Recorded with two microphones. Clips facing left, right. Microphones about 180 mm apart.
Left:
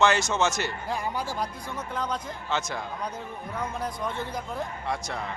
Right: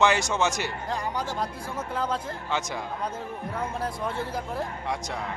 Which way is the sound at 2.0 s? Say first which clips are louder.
Right 2 dB; 5° right (ahead or behind).